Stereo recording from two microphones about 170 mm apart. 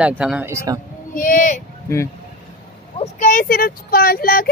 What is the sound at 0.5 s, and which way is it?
Speech, 20° right (ahead or behind).